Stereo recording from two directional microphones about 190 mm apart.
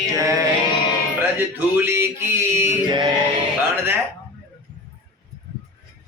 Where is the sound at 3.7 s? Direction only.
10° right (ahead or behind).